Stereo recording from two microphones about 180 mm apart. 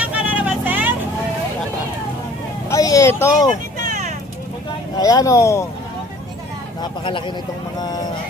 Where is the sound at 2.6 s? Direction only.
20° left (ahead or behind).